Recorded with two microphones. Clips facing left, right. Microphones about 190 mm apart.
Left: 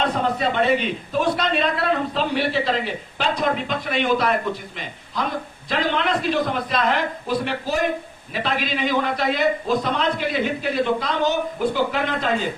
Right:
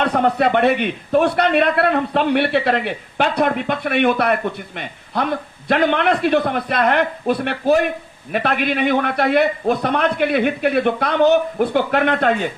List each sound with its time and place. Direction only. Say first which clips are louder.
0.0 s a man's voice: right 5 dB; 65° right (ahead or behind)